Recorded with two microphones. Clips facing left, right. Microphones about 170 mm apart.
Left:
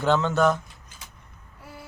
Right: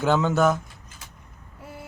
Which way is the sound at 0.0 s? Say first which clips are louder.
Right 1 dB; 5° right (ahead or behind).